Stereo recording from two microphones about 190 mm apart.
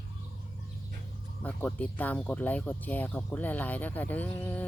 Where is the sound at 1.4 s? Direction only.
10° left (ahead or behind).